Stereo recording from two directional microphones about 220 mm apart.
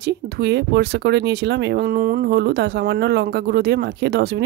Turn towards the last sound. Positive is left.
turn(degrees=-50)  # may be behind; listen again after turning